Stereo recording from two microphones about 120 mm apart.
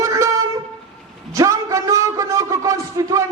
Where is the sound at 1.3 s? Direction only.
25° right (ahead or behind).